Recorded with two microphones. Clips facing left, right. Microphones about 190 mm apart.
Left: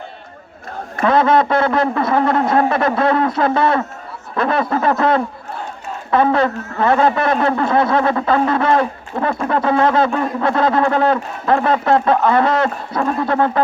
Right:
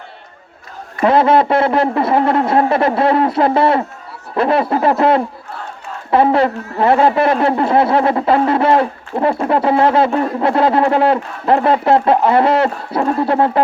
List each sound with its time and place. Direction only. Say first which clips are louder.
1.0 s a man's voice: right 2 dB; 30° right (ahead or behind)